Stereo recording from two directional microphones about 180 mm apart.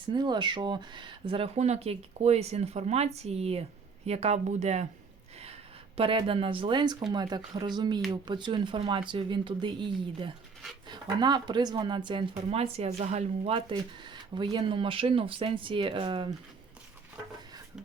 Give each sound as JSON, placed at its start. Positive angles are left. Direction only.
{"t": 0.1, "sound": "speech", "side_deg": -25}
{"t": 6.0, "sound": "a woman's voice", "side_deg": -30}